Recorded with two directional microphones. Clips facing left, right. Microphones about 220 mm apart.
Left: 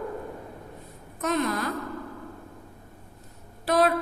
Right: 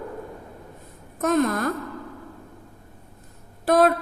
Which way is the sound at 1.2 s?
45° right (ahead or behind).